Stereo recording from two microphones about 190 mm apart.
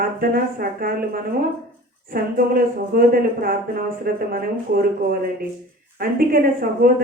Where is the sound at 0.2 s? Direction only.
50° right (ahead or behind).